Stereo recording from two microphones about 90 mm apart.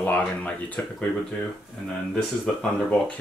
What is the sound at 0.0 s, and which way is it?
Speech, 15° left (ahead or behind).